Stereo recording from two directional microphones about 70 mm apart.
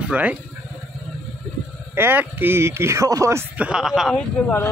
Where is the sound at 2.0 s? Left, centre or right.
Right.